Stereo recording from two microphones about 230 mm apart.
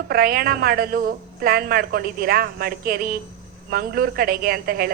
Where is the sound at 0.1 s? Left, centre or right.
Right.